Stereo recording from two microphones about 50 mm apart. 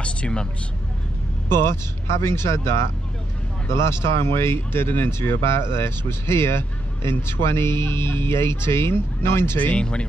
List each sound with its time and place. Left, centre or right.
0.0 s speech: left
2.2 s speech: left
9.8 s speech: centre